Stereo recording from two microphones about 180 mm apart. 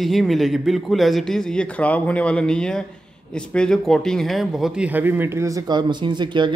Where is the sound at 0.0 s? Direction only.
Centre (ahead or behind).